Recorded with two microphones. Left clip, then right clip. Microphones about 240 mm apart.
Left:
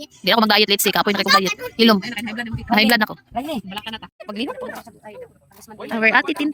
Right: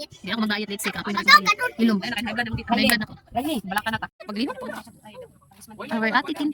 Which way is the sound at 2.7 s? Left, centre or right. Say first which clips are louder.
Left 6 dB; centre.